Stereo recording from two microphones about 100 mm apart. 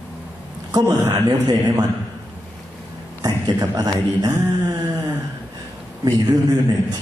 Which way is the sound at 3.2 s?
40° right (ahead or behind).